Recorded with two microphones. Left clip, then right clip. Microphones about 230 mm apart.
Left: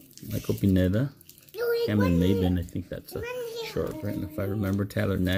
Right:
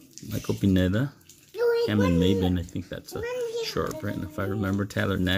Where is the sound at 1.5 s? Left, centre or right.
Left.